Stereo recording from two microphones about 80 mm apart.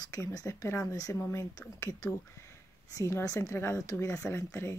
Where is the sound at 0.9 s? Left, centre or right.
Left.